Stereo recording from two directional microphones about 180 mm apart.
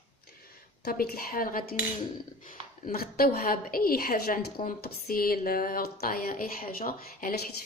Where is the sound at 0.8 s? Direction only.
55° left (ahead or behind).